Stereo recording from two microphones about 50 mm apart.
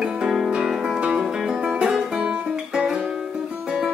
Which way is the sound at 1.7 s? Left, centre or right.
Centre.